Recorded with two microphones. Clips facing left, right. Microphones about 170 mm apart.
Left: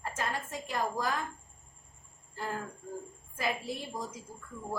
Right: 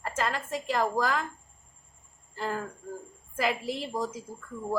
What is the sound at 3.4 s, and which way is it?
Speech, 90° right.